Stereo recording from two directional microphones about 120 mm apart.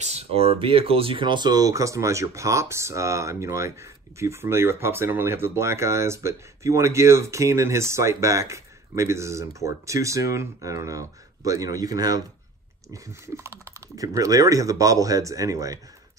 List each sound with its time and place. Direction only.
0.0 s speech: 60° right (ahead or behind); by 15.8 s 30° right (ahead or behind)